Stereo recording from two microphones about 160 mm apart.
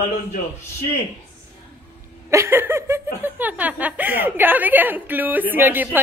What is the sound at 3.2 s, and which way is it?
A woman's voice, 10° right (ahead or behind).